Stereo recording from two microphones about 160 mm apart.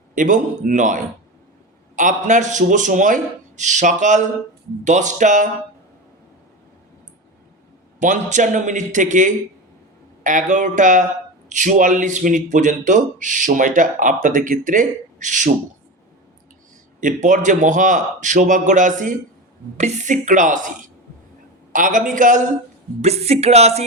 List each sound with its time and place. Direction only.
0.1 s speech: 55° right (ahead or behind)
7.9 s speech: 55° right (ahead or behind)
17.0 s speech: 50° right (ahead or behind)
21.7 s a man's voice: 55° right (ahead or behind)
23.0 s music: 40° right (ahead or behind)